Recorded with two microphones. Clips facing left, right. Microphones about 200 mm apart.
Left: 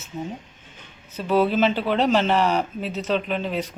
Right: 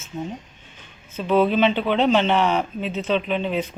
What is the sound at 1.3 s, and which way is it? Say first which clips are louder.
Speech: right 1 dB; 5° left (ahead or behind).